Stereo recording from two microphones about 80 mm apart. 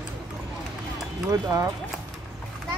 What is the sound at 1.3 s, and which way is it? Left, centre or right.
Speech, right.